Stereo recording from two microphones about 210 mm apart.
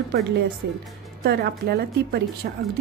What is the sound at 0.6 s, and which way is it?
A woman's voice, 55° right (ahead or behind).